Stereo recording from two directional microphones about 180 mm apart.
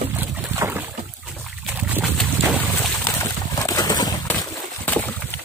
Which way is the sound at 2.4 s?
30° right (ahead or behind).